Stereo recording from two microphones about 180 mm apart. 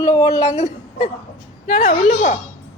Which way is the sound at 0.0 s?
20° left (ahead or behind).